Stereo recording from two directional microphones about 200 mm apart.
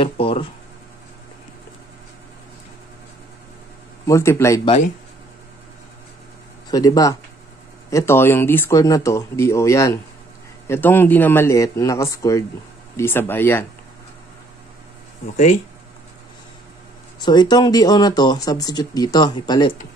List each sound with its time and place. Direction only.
0.0 s speech: 25° left (ahead or behind)
4.0 s speech: 15° left (ahead or behind)
6.7 s speech: 20° left (ahead or behind)
17.2 s speech: 20° left (ahead or behind)